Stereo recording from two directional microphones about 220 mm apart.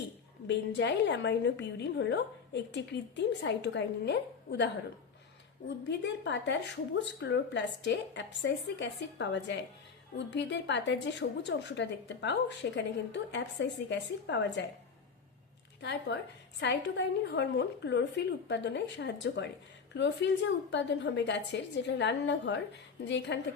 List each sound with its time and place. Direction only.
0.4 s a woman's voice: 55° left (ahead or behind)
5.9 s a woman's voice: 55° left (ahead or behind)
15.8 s a woman's voice: 50° left (ahead or behind)